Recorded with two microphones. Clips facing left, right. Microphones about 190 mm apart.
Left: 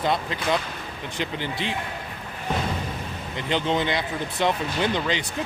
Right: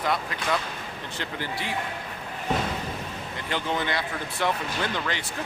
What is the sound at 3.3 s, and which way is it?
Speech, 20° left (ahead or behind).